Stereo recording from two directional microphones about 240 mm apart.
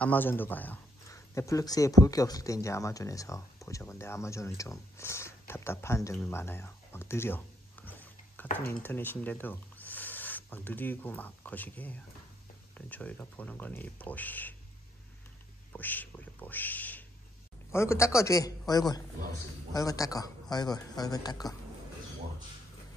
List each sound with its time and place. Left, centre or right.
0.0 s speech: centre
15.7 s speech: centre